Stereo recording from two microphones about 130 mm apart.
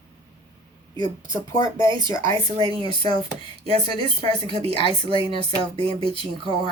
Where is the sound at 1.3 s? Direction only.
25° left (ahead or behind).